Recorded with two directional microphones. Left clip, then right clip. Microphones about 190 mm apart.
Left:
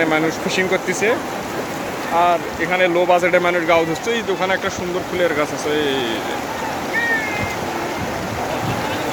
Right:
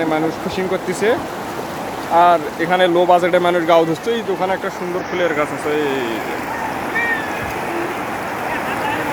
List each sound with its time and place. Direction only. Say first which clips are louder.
0.0 s speech: left 1 dB; 5° right (ahead or behind)
2.1 s speech: right 4 dB; 35° right (ahead or behind)
5.2 s speech: even; centre (ahead or behind)